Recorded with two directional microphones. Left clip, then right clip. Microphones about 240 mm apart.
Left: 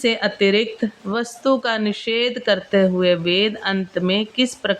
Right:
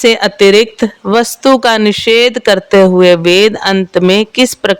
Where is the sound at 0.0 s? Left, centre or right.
Right.